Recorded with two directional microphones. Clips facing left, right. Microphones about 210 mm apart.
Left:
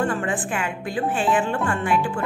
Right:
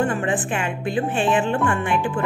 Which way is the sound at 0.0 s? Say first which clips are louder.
Right 2 dB; 20° right (ahead or behind).